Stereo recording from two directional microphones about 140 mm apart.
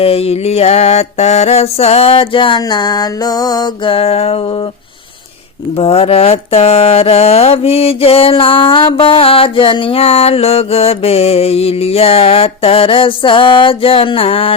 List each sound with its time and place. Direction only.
0.0 s mantra: 45° left (ahead or behind); by 3.9 s 30° left (ahead or behind)
3.9 s mantra: 45° left (ahead or behind)
5.7 s mantra: 45° left (ahead or behind)